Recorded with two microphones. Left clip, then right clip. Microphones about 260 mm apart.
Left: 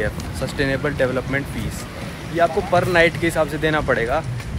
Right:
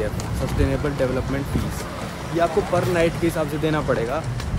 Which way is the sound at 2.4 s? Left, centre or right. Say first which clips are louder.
Left 3 dB; centre.